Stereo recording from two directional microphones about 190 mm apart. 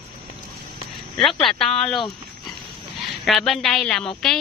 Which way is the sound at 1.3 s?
25° left (ahead or behind).